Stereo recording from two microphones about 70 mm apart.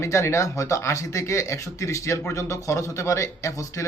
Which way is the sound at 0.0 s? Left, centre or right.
Left.